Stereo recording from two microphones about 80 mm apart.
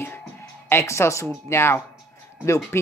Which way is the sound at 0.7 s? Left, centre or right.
Left.